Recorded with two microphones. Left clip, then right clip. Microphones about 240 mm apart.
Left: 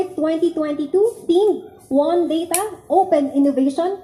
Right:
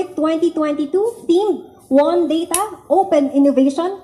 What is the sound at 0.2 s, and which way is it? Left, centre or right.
A woman's voice, right.